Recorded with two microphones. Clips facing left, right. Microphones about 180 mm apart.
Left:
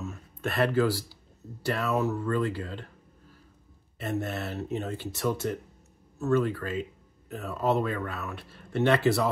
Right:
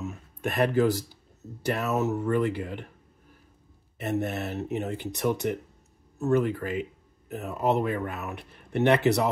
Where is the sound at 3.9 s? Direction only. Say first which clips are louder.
Right 3 dB; 20° right (ahead or behind).